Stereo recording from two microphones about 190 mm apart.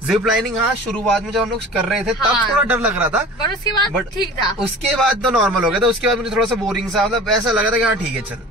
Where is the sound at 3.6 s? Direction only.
20° left (ahead or behind).